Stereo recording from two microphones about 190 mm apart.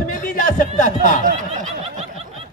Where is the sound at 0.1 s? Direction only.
45° left (ahead or behind).